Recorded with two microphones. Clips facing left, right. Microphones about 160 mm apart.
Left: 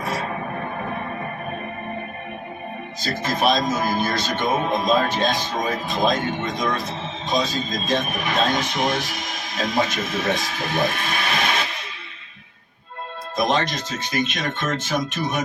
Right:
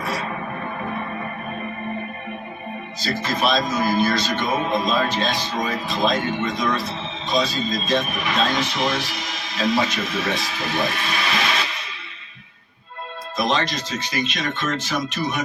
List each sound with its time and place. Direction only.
3.0 s speech: 50° left (ahead or behind)
13.3 s speech: 50° left (ahead or behind)